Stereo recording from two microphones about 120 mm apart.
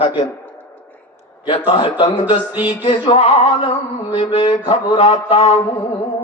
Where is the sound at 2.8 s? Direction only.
55° left (ahead or behind).